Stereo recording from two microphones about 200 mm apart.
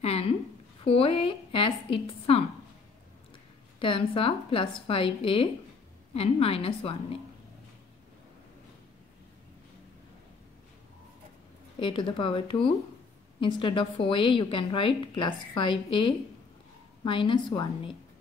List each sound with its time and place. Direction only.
0.0 s a sound: 30° left (ahead or behind)
0.8 s a woman's voice: 25° left (ahead or behind)
3.8 s a woman's voice: 25° left (ahead or behind)
11.8 s a woman's voice: 25° left (ahead or behind)